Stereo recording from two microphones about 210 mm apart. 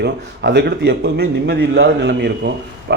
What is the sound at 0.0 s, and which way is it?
A man's voice, 55° right (ahead or behind).